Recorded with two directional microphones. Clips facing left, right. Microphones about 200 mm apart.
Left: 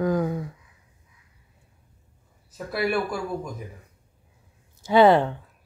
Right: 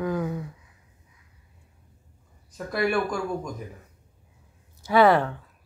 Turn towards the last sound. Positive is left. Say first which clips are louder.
# left 2 dB
turn(degrees=25)  # may be behind; listen again after turning